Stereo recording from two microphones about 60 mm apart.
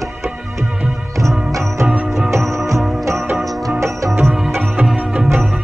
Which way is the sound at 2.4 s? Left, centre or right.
Centre.